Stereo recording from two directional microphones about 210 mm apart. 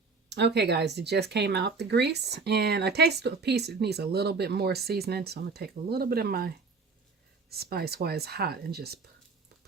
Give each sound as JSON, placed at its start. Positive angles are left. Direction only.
{"t": 0.3, "sound": "speech", "side_deg": -55}
{"t": 7.5, "sound": "speech", "side_deg": -50}